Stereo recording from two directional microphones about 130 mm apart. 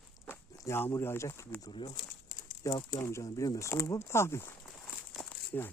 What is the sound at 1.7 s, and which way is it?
Speech, 40° left (ahead or behind).